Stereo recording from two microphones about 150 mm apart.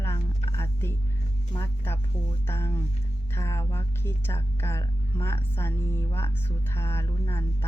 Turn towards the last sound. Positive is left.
turn(degrees=15)  # may be behind; listen again after turning